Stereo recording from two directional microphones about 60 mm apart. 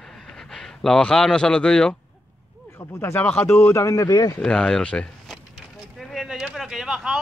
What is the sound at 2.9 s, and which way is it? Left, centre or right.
Speech, left.